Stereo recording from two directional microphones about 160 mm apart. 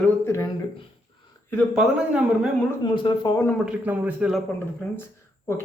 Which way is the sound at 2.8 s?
30° left (ahead or behind).